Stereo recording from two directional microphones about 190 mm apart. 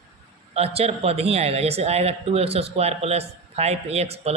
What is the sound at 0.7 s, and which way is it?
Speech, 30° right (ahead or behind).